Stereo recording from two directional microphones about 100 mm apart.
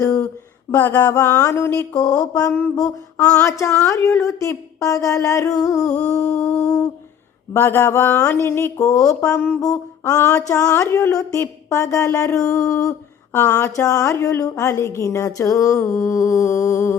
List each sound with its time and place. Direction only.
0.7 s speech: 20° left (ahead or behind)
2.0 s a woman's voice: 35° left (ahead or behind)
6.3 s a sound: 5° left (ahead or behind)
7.5 s a woman's voice: 20° left (ahead or behind)